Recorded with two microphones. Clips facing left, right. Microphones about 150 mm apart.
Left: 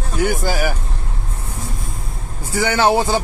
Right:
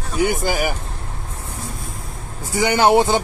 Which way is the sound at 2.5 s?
15° right (ahead or behind).